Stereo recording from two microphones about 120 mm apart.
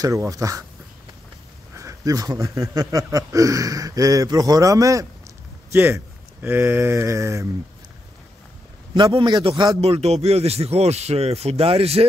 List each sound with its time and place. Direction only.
0.0 s speech: 25° right (ahead or behind)
1.8 s speech: 30° right (ahead or behind)
8.9 s a man's voice: 40° right (ahead or behind)
9.8 s speech: 60° right (ahead or behind)